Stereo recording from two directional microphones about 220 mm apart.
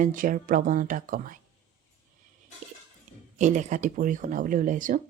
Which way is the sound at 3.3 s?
35° right (ahead or behind).